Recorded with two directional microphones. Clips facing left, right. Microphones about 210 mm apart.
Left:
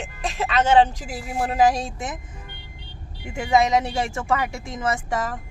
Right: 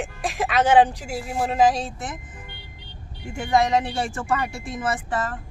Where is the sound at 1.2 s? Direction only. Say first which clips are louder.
Even; 5° left (ahead or behind).